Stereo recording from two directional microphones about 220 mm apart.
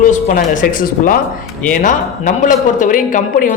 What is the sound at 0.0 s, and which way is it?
A woman's voice, 35° left (ahead or behind).